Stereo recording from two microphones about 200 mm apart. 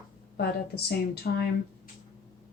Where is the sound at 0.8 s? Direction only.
50° left (ahead or behind).